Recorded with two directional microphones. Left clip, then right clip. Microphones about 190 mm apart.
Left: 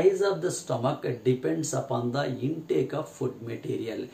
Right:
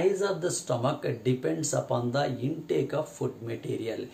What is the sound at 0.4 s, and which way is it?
Speech, 20° right (ahead or behind).